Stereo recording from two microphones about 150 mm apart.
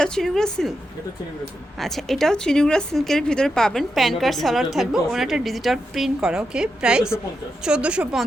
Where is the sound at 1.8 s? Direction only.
Centre (ahead or behind).